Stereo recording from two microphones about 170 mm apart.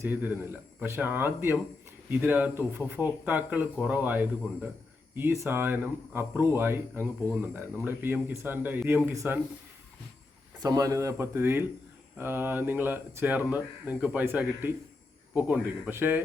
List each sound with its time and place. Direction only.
0.0 s speech: 10° right (ahead or behind)
7.3 s speech: 10° left (ahead or behind)
7.9 s speech: 10° right (ahead or behind)
10.6 s speech: 20° right (ahead or behind)
15.9 s speech: 10° right (ahead or behind)